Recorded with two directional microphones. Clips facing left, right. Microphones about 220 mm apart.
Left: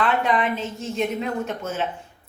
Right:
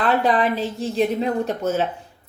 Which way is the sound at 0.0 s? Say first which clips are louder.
Right 3 dB; 35° right (ahead or behind).